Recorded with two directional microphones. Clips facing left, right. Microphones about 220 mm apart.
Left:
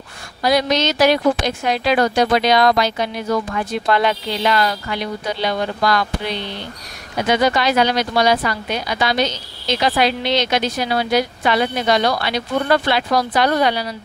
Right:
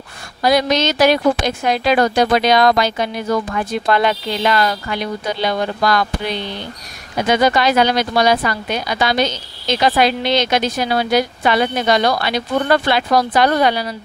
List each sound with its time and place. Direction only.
0.4 s a woman's voice: 50° right (ahead or behind)
7.2 s a woman's voice: 45° right (ahead or behind)